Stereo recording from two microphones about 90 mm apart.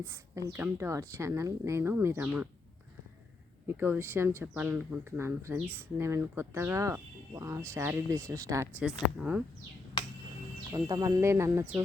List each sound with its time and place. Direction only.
0.0 s a woman's voice: 30° right (ahead or behind)
2.2 s speech: 20° right (ahead or behind)
3.7 s speech: 25° right (ahead or behind)
8.8 s speech: 5° right (ahead or behind)
10.8 s speech: 45° right (ahead or behind)